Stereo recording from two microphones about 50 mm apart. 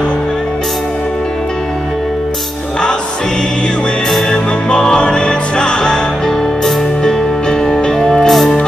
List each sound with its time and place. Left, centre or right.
4.6 s music: centre
7.6 s music: centre